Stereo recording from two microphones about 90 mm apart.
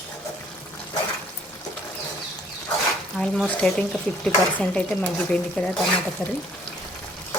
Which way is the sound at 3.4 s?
15° left (ahead or behind).